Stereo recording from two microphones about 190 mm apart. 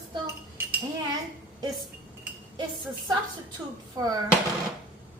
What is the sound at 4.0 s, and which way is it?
Speech, 20° right (ahead or behind).